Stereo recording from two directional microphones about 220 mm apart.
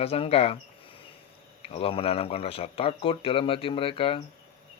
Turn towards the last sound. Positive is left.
turn(degrees=25)  # may be behind; listen again after turning